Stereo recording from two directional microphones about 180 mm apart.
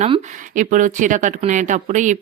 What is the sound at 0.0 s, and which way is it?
Speech, 40° right (ahead or behind).